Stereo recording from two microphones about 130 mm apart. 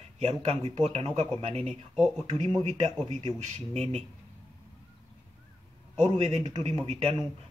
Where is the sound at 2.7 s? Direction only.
60° right (ahead or behind).